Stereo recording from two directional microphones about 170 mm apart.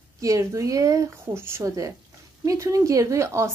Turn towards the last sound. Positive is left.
turn(degrees=-15)  # may be behind; listen again after turning